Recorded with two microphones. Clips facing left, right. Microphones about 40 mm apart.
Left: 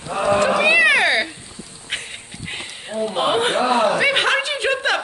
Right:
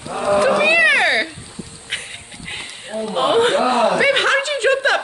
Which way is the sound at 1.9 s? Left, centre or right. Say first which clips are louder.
Even; centre.